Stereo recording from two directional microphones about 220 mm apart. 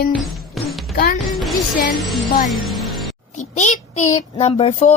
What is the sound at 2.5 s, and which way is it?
Music, centre (ahead or behind).